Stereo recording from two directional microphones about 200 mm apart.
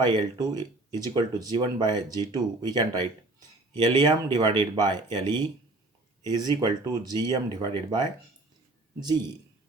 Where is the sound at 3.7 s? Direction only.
20° right (ahead or behind).